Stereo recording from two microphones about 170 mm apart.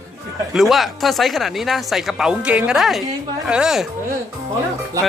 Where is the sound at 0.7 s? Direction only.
Centre (ahead or behind).